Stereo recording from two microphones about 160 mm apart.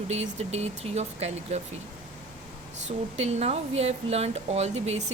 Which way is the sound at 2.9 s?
45° right (ahead or behind).